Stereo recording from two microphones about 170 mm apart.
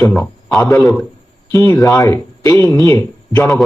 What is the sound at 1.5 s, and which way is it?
A man's voice, 20° left (ahead or behind).